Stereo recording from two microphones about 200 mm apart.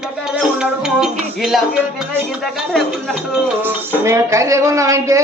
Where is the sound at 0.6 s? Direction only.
Centre (ahead or behind).